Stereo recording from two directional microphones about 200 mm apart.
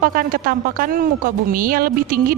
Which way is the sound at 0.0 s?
45° right (ahead or behind).